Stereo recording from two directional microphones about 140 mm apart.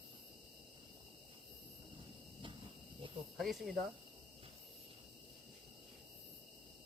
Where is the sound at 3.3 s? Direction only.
Centre (ahead or behind).